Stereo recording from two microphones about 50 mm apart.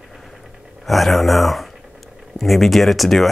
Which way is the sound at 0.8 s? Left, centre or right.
Centre.